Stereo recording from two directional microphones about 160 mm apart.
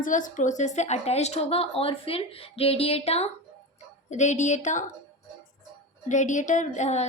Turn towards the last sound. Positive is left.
turn(degrees=45)  # may be behind; listen again after turning